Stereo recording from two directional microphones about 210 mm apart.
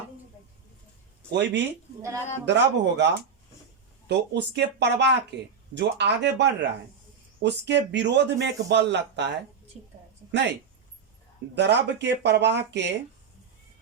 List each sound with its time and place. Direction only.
1.3 s a man's voice: 55° right (ahead or behind)
2.0 s a man's voice: 15° right (ahead or behind)
2.5 s a man's voice: 55° right (ahead or behind)
11.5 s a man's voice: 55° right (ahead or behind)